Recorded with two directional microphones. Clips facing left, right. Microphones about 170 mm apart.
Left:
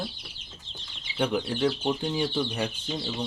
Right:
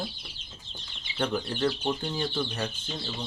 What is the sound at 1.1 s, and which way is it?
Speech, 10° left (ahead or behind).